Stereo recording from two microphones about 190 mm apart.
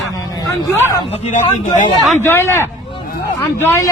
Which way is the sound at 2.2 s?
15° left (ahead or behind).